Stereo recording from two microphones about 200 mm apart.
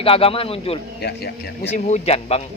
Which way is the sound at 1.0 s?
55° left (ahead or behind).